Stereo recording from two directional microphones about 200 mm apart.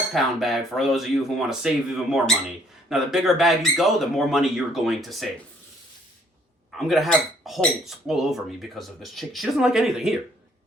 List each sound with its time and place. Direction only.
0.1 s speech: centre (ahead or behind)
6.7 s speech: centre (ahead or behind)